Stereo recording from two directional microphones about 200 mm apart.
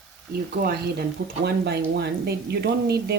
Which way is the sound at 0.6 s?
40° right (ahead or behind).